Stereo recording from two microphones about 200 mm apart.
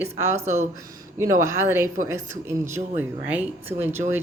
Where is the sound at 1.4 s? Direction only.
15° right (ahead or behind).